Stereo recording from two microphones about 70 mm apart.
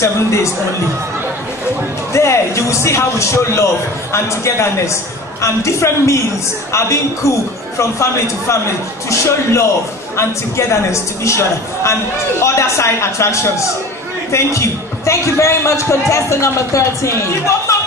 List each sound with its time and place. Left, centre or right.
0.0 s a man's voice: left
2.1 s a man's voice: left
7.2 s a man's voice: left
10.7 s a man's voice: left